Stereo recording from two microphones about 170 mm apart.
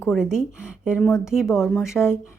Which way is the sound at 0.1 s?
5° right (ahead or behind).